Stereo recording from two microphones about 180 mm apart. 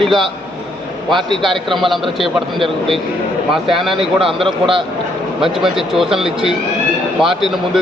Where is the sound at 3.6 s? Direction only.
Centre (ahead or behind).